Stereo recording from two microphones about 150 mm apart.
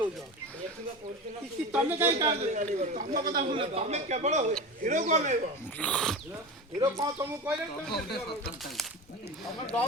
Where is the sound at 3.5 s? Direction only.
40° right (ahead or behind).